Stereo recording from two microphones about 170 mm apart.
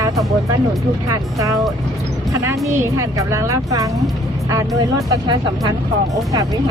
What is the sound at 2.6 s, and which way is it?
Speech, 20° right (ahead or behind).